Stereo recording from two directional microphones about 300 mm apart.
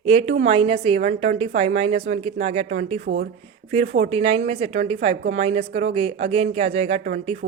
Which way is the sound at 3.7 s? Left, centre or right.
Right.